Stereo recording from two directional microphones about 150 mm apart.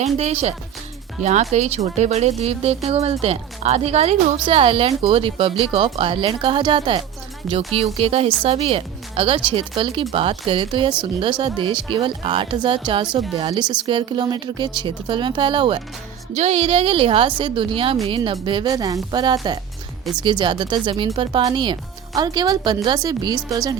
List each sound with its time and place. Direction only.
0.0 s speech: 45° right (ahead or behind)
4.4 s speech: 35° right (ahead or behind)
7.4 s speech: centre (ahead or behind)
7.9 s speech: 40° right (ahead or behind)
16.3 s a woman's voice: 45° right (ahead or behind); by 23.7 s 25° right (ahead or behind)